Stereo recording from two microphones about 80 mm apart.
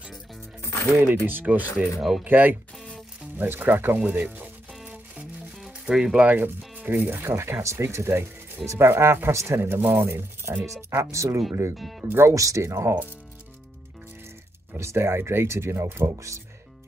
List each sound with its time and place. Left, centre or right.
1.0 s speech: right
2.0 s speech: centre
2.2 s speech: right
4.8 s music: centre
6.2 s speech: right
12.0 s speech: right
12.4 s speech: right
14.8 s speech: right